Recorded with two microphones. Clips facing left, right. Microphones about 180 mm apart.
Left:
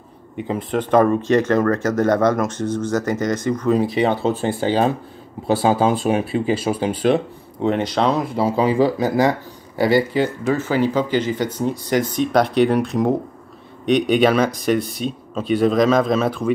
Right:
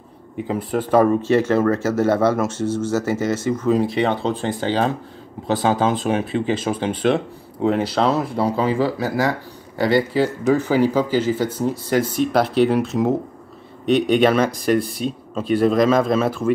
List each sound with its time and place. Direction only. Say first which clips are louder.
0.5 s speech: left 1 dB; 5° right (ahead or behind)
7.6 s speech: even; 5° right (ahead or behind)
8.5 s speech: left 6 dB; 15° left (ahead or behind)
9.8 s speech: left 1 dB; 5° left (ahead or behind)